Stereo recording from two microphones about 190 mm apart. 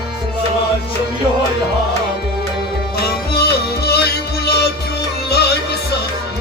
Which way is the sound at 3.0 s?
55° left (ahead or behind).